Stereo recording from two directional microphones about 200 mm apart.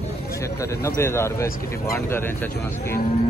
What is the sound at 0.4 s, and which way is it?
Speech, 15° left (ahead or behind).